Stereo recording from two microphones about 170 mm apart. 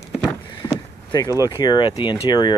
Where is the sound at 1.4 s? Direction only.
25° left (ahead or behind).